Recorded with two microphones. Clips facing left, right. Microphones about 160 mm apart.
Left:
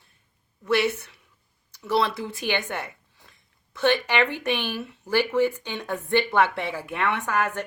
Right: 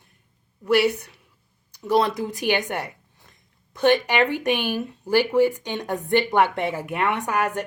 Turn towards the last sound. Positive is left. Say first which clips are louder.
# right 2 dB
turn(degrees=-15)  # may be behind; listen again after turning